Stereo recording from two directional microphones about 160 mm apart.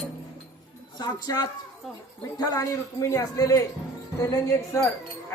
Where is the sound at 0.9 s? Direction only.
25° left (ahead or behind).